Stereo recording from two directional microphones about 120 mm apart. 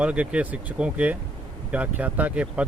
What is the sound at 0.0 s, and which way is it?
Speech, 10° right (ahead or behind).